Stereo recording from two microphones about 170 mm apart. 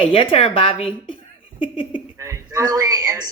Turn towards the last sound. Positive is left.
turn(degrees=-20)  # may be behind; listen again after turning